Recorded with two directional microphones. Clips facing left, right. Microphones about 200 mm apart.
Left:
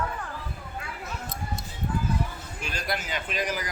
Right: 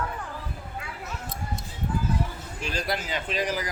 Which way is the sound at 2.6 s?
30° right (ahead or behind).